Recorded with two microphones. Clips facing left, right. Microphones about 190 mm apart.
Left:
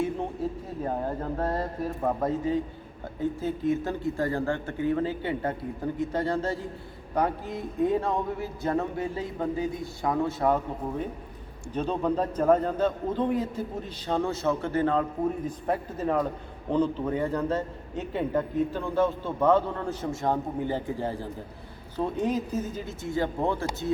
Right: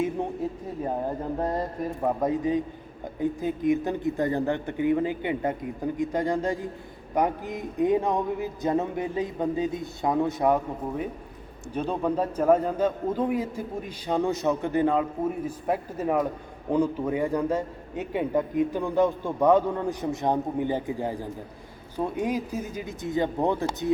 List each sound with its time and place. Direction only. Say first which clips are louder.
1.4 s a man's voice: right 1 dB; 15° right (ahead or behind)